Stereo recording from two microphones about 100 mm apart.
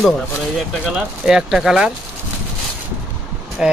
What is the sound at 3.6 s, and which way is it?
Speech, 5° right (ahead or behind).